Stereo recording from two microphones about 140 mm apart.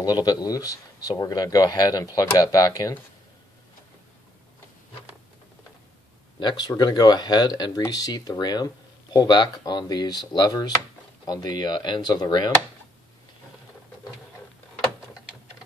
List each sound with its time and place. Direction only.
0.0 s speech: 30° left (ahead or behind)
6.4 s speech: 30° left (ahead or behind)